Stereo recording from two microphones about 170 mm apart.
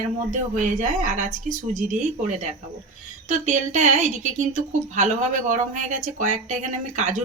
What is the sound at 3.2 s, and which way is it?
A woman's voice, 45° right (ahead or behind).